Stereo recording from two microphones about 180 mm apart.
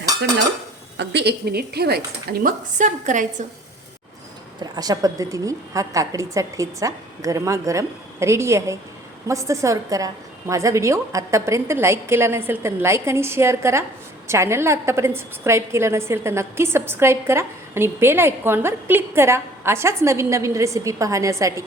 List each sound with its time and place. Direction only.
0.9 s a woman's voice: 70° right (ahead or behind)
2.4 s a woman's voice: 45° right (ahead or behind)
4.6 s a woman's voice: 20° right (ahead or behind)